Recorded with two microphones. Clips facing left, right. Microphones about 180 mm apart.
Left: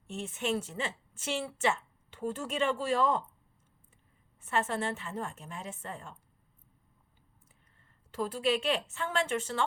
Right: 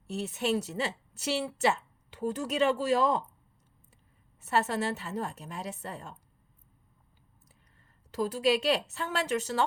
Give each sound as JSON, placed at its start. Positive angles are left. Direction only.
{"t": 0.1, "sound": "a woman's voice", "side_deg": -40}
{"t": 4.4, "sound": "a woman's voice", "side_deg": -40}
{"t": 8.1, "sound": "a woman's voice", "side_deg": -40}